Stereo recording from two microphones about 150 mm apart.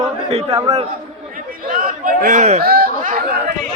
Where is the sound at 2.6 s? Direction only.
85° right.